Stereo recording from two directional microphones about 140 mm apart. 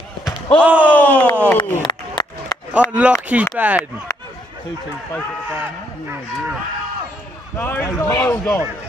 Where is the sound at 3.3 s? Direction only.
10° right (ahead or behind).